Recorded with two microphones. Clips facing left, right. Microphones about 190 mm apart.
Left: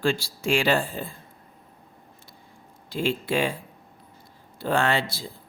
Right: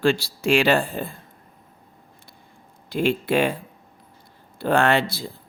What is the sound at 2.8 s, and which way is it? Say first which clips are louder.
Speech: right 4 dB; 60° right (ahead or behind).